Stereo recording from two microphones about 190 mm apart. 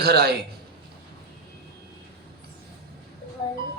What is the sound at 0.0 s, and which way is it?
Speech, 60° right (ahead or behind).